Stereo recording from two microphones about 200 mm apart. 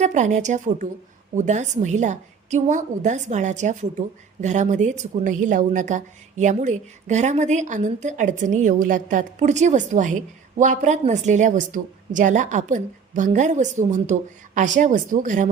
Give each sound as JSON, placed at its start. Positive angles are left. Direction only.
{"t": 0.0, "sound": "a woman's voice", "side_deg": -35}